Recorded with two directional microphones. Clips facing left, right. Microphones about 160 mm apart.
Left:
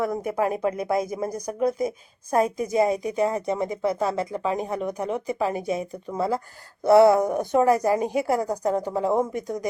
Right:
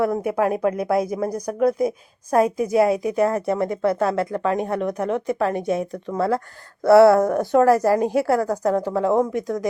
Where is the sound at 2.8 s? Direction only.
5° right (ahead or behind).